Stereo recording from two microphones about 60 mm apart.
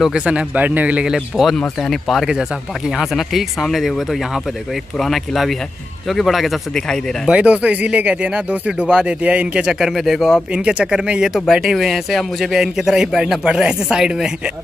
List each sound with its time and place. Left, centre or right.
0.1 s speech: centre
1.3 s speech: centre
7.2 s speech: centre
9.7 s speech: centre
10.5 s speech: centre